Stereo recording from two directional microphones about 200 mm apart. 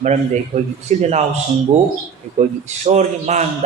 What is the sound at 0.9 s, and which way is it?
Speech, 35° right (ahead or behind).